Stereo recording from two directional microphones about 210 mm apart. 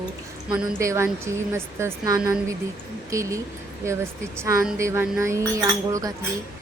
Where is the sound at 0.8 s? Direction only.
15° right (ahead or behind).